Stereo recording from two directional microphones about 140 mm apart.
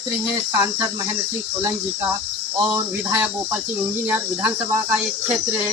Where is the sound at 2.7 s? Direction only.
15° right (ahead or behind).